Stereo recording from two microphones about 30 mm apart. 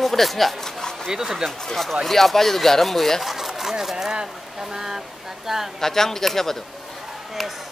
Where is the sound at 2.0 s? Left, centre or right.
Centre.